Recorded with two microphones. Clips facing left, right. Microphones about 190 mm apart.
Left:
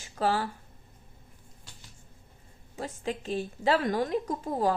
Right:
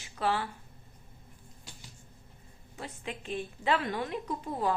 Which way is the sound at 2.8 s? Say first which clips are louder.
Left 6 dB; 40° left (ahead or behind).